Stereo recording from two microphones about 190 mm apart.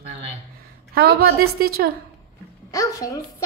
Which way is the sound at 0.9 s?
55° right (ahead or behind).